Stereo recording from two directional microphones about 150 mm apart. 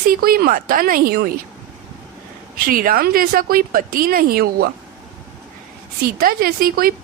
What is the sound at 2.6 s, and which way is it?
Speech, 70° right (ahead or behind).